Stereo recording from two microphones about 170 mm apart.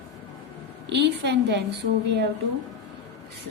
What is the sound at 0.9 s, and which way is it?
Speech, 90° right.